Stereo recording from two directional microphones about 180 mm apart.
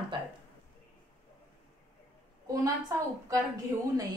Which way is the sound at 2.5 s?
20° right (ahead or behind).